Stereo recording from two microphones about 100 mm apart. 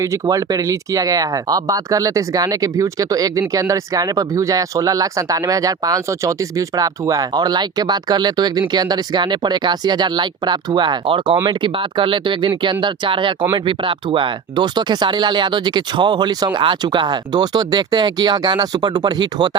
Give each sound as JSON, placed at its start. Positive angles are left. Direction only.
{"t": 0.0, "sound": "speech", "side_deg": -35}